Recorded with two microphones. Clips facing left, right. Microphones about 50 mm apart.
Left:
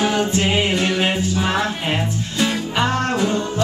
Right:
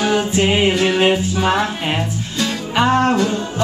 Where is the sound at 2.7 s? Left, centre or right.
Centre.